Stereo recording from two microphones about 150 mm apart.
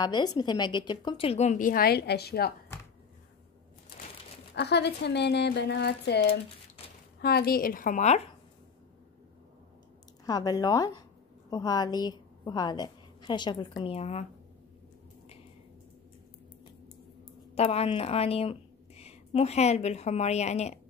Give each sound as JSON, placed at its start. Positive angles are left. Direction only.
{"t": 0.0, "sound": "speech", "side_deg": 30}
{"t": 4.7, "sound": "speech", "side_deg": 90}
{"t": 10.2, "sound": "a woman's voice", "side_deg": 25}
{"t": 17.6, "sound": "a woman's voice", "side_deg": 40}